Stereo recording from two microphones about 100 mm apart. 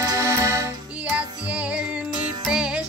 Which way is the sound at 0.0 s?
35° right (ahead or behind).